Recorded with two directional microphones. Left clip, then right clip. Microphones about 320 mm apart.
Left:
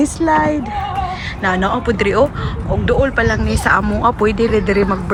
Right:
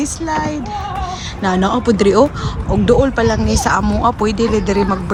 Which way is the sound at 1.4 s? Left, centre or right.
Centre.